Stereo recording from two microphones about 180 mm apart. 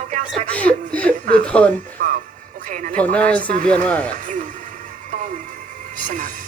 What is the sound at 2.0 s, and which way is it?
Speech, 45° right (ahead or behind).